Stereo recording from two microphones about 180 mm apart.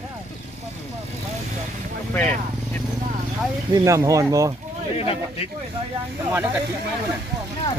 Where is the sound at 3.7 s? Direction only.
20° right (ahead or behind).